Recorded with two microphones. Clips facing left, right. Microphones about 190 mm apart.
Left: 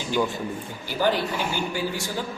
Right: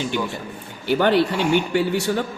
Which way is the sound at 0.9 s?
65° right (ahead or behind).